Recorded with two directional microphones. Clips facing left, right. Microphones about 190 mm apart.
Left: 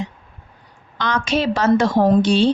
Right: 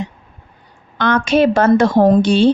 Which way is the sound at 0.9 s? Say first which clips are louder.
Right 7 dB; 55° right (ahead or behind).